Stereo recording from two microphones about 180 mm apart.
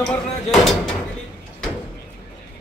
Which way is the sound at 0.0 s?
Centre (ahead or behind).